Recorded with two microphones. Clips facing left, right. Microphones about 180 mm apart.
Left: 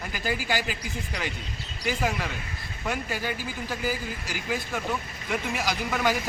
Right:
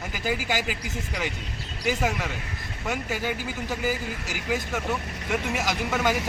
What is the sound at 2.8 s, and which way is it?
Speech, 15° right (ahead or behind).